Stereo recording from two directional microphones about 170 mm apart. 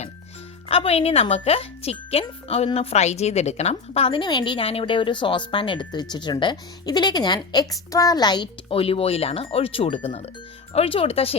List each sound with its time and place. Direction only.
0.7 s a woman's voice: 35° left (ahead or behind)